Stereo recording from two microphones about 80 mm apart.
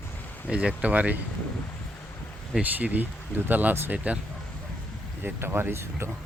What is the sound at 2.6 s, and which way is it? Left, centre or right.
Speech, right.